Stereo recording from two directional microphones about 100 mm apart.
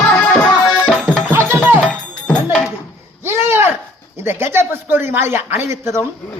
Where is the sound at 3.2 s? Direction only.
25° right (ahead or behind).